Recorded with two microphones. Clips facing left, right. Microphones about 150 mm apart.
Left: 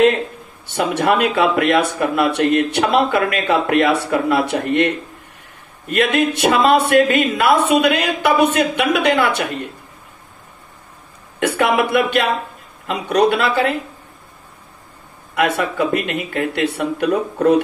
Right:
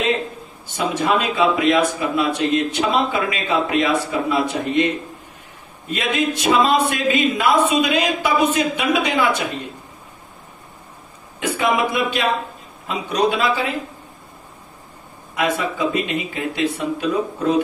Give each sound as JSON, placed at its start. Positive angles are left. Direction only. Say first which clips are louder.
{"t": 0.7, "sound": "speech", "louder": "left 3 dB", "side_deg": 65}
{"t": 11.3, "sound": "speech", "louder": "left 3 dB", "side_deg": 65}
{"t": 15.3, "sound": "speech", "louder": "left 3 dB", "side_deg": 65}